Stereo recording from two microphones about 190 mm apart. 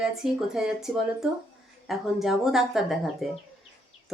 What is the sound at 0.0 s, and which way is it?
Speech, 5° right (ahead or behind).